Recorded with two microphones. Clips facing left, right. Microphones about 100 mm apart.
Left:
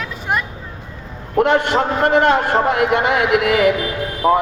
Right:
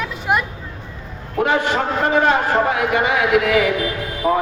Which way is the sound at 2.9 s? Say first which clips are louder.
Left 2 dB; 65° left (ahead or behind).